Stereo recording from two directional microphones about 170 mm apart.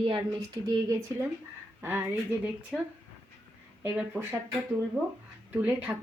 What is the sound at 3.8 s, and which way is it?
Speech, 10° right (ahead or behind).